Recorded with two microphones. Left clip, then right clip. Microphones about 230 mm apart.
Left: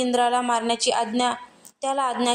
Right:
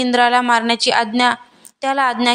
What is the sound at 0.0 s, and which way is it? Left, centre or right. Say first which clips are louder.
A woman's voice: right 7 dB; right.